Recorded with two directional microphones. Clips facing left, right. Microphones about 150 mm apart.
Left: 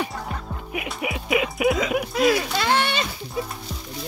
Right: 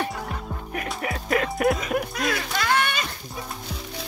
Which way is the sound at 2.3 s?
30° left (ahead or behind).